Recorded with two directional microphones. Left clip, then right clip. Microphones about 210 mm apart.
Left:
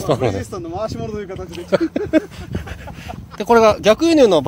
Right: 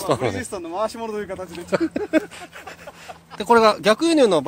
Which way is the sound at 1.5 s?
5° left (ahead or behind).